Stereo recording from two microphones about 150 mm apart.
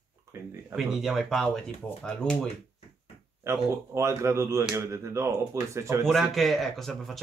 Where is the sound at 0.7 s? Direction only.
Centre (ahead or behind).